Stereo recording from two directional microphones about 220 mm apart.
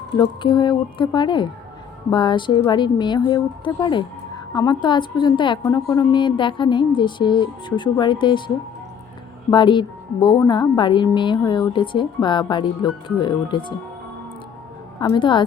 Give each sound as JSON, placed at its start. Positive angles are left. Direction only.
{"t": 0.2, "sound": "a woman's voice", "side_deg": 20}
{"t": 14.9, "sound": "a woman's voice", "side_deg": 20}